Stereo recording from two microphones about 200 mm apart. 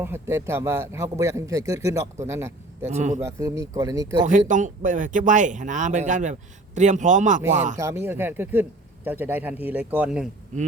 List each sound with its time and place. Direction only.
0.0 s speech: 10° right (ahead or behind)
2.8 s speech: 35° right (ahead or behind)
3.2 s speech: 15° right (ahead or behind)
4.3 s speech: 40° right (ahead or behind)
7.8 s speech: 15° right (ahead or behind)